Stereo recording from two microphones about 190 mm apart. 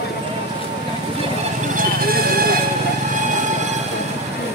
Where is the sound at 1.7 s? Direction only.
50° right (ahead or behind).